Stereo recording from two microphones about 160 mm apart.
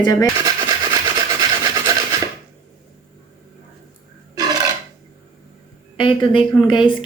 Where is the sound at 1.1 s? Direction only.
25° right (ahead or behind).